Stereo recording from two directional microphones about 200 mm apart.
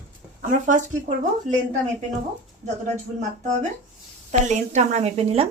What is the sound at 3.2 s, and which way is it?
Speech, 35° right (ahead or behind).